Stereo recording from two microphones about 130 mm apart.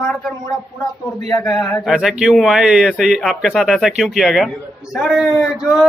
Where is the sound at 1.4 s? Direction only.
5° left (ahead or behind).